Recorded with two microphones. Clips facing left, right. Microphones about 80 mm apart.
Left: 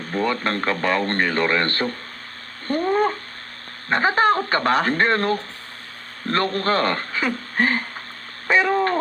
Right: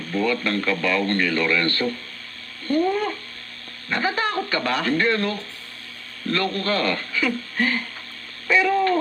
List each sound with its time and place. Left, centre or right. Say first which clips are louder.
0.1 s speech: even; left
2.6 s cat: left 1 dB; left
3.8 s speech: left 6 dB; left
8.4 s a sound: even; left